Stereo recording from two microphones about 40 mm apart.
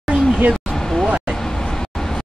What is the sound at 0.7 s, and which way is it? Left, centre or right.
Vehicle, centre.